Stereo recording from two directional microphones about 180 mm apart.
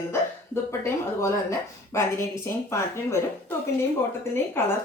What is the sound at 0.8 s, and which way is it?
A woman's voice, 15° left (ahead or behind).